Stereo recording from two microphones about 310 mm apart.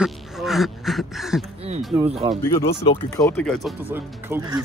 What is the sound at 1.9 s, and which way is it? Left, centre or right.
Speech, centre.